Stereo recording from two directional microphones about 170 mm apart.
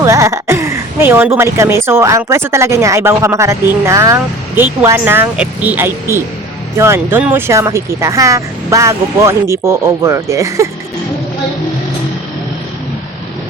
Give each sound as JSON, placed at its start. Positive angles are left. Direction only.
{"t": 0.0, "sound": "speech", "side_deg": -15}